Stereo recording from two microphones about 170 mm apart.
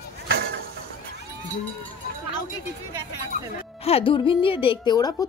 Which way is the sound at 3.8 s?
35° left (ahead or behind).